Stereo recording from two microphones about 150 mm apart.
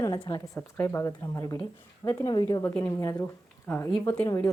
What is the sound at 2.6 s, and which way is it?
Speech, 15° left (ahead or behind).